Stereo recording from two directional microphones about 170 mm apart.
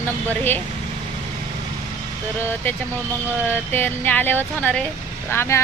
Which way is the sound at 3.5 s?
10° left (ahead or behind).